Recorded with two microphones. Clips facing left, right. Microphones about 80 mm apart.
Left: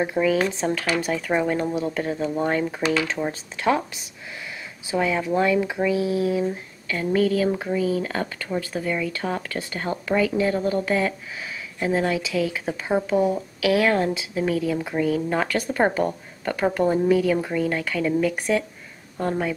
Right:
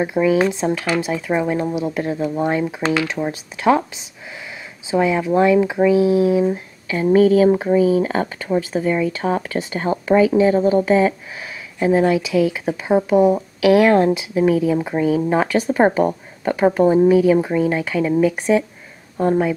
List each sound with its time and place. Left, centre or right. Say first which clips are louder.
0.0 s speech: right 5 dB; centre
4.9 s speech: right 6 dB; centre